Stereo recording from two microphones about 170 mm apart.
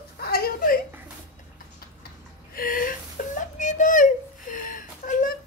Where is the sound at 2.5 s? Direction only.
55° left (ahead or behind).